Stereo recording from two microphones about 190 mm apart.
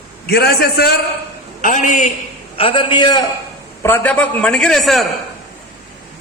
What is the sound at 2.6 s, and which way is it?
Speech, 30° left (ahead or behind).